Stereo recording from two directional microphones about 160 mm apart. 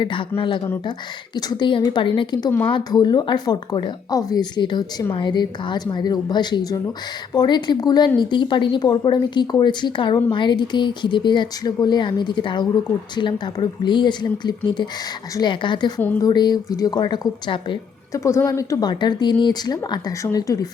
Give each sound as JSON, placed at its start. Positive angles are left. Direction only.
{"t": 0.0, "sound": "a woman's voice", "side_deg": 30}
{"t": 18.2, "sound": "a woman's voice", "side_deg": 20}